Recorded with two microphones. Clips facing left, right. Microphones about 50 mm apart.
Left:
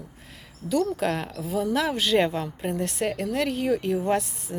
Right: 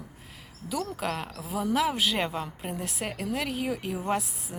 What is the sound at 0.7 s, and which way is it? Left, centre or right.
A woman's voice, centre.